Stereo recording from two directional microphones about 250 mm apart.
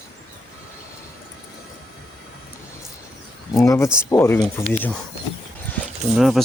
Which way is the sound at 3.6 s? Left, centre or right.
Centre.